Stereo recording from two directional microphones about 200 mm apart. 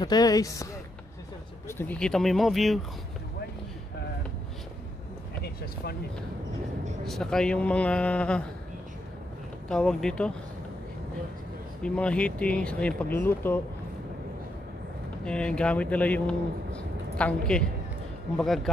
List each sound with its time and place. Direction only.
0.0 s speech: 20° left (ahead or behind)
1.7 s speech: 10° left (ahead or behind)
5.4 s speech: 50° left (ahead or behind)
7.1 s speech: centre (ahead or behind)
9.7 s speech: 5° left (ahead or behind)
11.8 s speech: 5° left (ahead or behind)
15.2 s speech: 5° left (ahead or behind)